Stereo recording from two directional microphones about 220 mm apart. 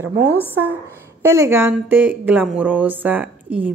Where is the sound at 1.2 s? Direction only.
10° right (ahead or behind).